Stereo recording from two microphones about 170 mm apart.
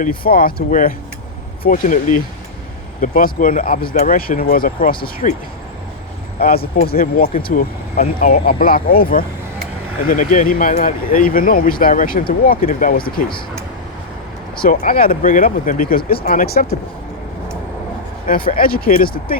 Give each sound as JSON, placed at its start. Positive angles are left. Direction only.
{"t": 0.3, "sound": "speech", "side_deg": 60}
{"t": 3.8, "sound": "speech", "side_deg": 30}
{"t": 4.0, "sound": "speech", "side_deg": 55}
{"t": 6.4, "sound": "speech", "side_deg": 60}
{"t": 7.5, "sound": "speech", "side_deg": 45}
{"t": 14.6, "sound": "speech", "side_deg": 55}
{"t": 18.3, "sound": "speech", "side_deg": 55}